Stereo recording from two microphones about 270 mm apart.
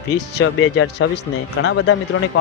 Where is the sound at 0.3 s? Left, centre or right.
Left.